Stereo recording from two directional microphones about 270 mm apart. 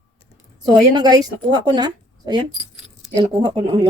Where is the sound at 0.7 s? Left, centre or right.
Centre.